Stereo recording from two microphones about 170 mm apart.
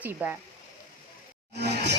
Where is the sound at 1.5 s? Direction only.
80° right.